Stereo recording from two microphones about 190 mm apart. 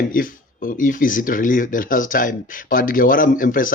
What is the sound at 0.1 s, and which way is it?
Speech, 45° left (ahead or behind).